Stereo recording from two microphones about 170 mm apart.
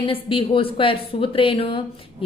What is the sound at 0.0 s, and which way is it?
A woman's voice, 30° left (ahead or behind).